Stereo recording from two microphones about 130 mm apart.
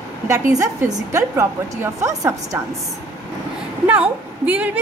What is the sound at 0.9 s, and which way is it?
A woman's voice, 25° right (ahead or behind).